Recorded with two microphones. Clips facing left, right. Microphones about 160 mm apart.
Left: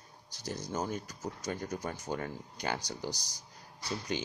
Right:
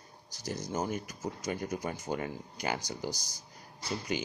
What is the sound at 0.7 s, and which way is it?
Speech, 5° right (ahead or behind).